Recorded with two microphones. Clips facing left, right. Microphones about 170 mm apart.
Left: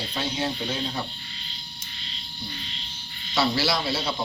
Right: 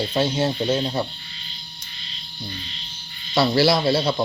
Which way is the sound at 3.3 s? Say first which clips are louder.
Right 7 dB; 40° right (ahead or behind).